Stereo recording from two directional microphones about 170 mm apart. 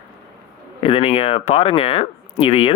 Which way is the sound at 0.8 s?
35° left (ahead or behind).